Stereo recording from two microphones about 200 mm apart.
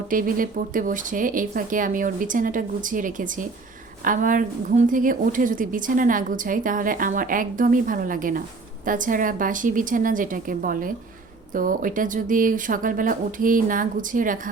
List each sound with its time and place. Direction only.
0.1 s a woman's voice: 45° right (ahead or behind)